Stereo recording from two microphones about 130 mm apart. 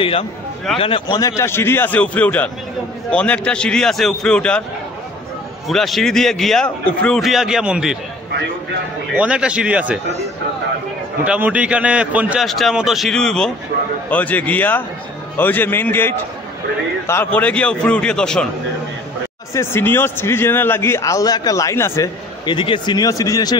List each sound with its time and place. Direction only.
0.7 s a man's voice: 45° left (ahead or behind)
1.1 s a man's voice: 25° left (ahead or behind); by 4.6 s 10° left (ahead or behind)
5.7 s a man's voice: centre (ahead or behind)
9.1 s a man's voice: 10° right (ahead or behind)
11.2 s a man's voice: 10° right (ahead or behind)
12.4 s a man's voice: centre (ahead or behind)
19.5 s a man's voice: 20° left (ahead or behind)
22.5 s speech: 40° left (ahead or behind)